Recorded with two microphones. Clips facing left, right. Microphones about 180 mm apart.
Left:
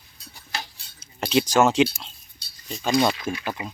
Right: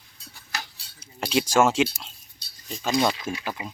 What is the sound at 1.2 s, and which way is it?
Speech, 10° right (ahead or behind).